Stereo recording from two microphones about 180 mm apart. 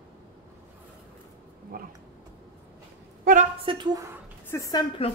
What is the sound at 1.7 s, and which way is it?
Speech, 55° right (ahead or behind).